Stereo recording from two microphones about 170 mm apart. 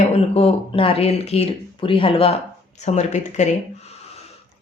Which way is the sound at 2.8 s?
45° left (ahead or behind).